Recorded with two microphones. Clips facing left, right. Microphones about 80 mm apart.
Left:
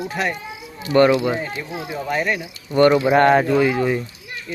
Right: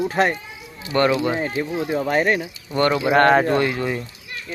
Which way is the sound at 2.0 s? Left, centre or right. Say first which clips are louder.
Right 2 dB; right.